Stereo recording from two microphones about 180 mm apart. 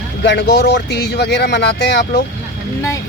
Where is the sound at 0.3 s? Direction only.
70° left (ahead or behind).